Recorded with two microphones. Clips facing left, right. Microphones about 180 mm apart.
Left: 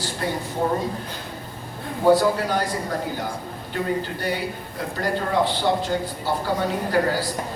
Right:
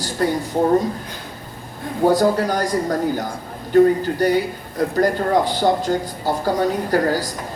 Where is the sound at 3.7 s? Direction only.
45° right (ahead or behind).